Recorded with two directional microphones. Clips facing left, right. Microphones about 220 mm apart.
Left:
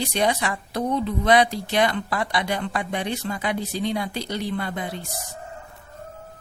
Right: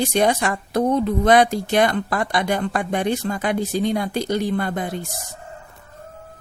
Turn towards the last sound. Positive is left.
turn(degrees=-50)  # may be behind; listen again after turning